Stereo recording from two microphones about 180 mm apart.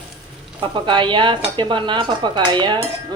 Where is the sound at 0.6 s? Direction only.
25° right (ahead or behind).